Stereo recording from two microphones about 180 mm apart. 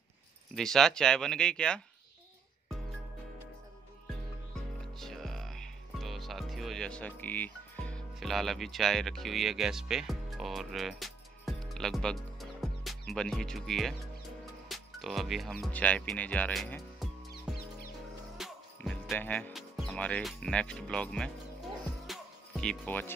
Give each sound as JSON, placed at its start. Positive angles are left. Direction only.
{"t": 0.6, "sound": "speech", "side_deg": 0}
{"t": 4.9, "sound": "music", "side_deg": 0}
{"t": 15.6, "sound": "speech", "side_deg": 10}
{"t": 17.3, "sound": "music", "side_deg": 55}
{"t": 18.4, "sound": "music", "side_deg": 0}
{"t": 18.8, "sound": "speech", "side_deg": 5}
{"t": 22.0, "sound": "music", "side_deg": 0}